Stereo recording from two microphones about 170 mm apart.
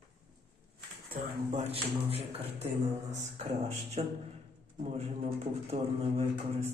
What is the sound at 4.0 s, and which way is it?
A man's voice, 40° right (ahead or behind).